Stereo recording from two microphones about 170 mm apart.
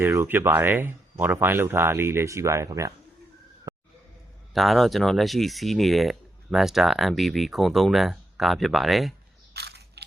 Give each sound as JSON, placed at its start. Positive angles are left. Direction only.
{"t": 0.0, "sound": "speech", "side_deg": -15}
{"t": 3.7, "sound": "a sound", "side_deg": -20}
{"t": 4.5, "sound": "speech", "side_deg": 0}
{"t": 9.5, "sound": "crushing", "side_deg": -75}